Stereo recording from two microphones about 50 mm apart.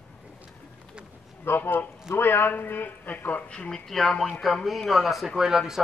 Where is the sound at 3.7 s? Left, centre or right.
Centre.